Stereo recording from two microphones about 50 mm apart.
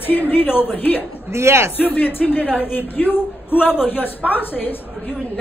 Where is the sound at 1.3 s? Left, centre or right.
Right.